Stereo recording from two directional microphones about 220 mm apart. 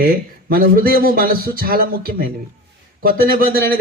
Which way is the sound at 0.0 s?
40° right (ahead or behind).